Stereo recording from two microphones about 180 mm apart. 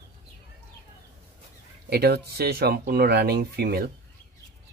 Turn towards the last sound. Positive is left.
turn(degrees=-60)  # may be behind; listen again after turning